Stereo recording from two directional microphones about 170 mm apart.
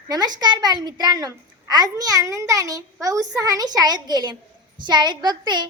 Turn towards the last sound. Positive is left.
turn(degrees=-25)  # may be behind; listen again after turning